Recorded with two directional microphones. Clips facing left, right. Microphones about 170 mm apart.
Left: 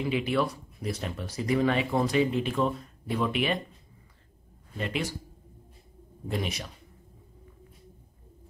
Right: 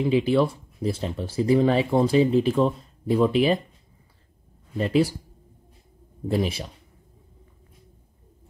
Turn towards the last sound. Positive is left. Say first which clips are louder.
# right 7 dB
turn(degrees=-30)  # may be behind; listen again after turning